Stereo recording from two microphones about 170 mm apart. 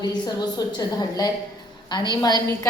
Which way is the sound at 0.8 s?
20° left (ahead or behind).